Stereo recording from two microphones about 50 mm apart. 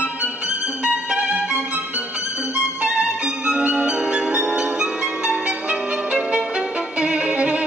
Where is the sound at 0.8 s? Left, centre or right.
Right.